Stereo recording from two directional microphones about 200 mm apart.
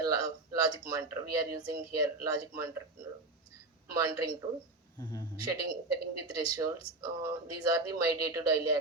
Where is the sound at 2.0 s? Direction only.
20° right (ahead or behind).